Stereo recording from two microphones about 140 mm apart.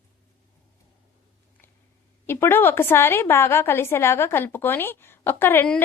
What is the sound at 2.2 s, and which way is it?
A woman's voice, 15° left (ahead or behind).